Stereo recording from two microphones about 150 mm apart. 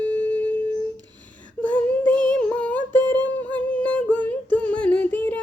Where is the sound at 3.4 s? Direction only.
10° left (ahead or behind).